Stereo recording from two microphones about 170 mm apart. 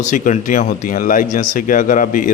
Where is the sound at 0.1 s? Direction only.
50° left (ahead or behind).